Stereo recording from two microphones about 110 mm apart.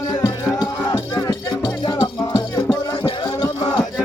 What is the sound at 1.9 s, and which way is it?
Music, 50° left (ahead or behind).